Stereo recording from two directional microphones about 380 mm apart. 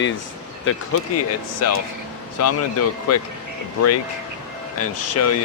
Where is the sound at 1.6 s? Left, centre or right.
Left.